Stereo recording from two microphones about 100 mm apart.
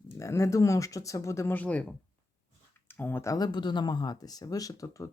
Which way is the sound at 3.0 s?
20° left (ahead or behind).